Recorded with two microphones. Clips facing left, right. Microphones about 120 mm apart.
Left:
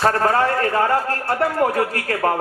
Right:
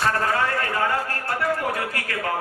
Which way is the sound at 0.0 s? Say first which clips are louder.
Left 5 dB; 40° left (ahead or behind).